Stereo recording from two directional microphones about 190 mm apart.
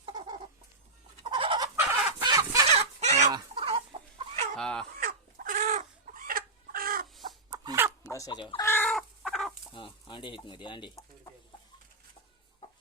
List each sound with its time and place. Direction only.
0.0 s chicken: 20° right (ahead or behind)
2.6 s a sound: 35° right (ahead or behind)
3.3 s chicken: 25° right (ahead or behind)
4.5 s crow: 5° left (ahead or behind)
4.9 s chicken: 50° right (ahead or behind)
7.5 s chicken: 15° right (ahead or behind)
8.1 s chicken: 20° left (ahead or behind)
8.6 s chicken: 10° left (ahead or behind)
8.9 s chicken: centre (ahead or behind)
9.7 s speech: 25° left (ahead or behind)